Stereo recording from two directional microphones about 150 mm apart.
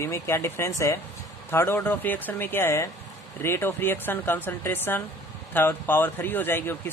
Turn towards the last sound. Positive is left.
turn(degrees=15)  # may be behind; listen again after turning